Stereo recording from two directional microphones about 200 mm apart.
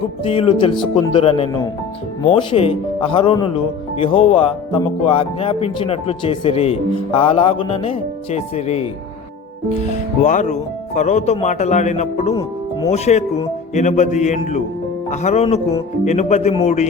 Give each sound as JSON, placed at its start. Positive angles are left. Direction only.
{"t": 0.3, "sound": "speech", "side_deg": 25}
{"t": 10.2, "sound": "a man's voice", "side_deg": 35}
{"t": 12.3, "sound": "speech", "side_deg": 15}
{"t": 12.9, "sound": "a man's voice", "side_deg": 30}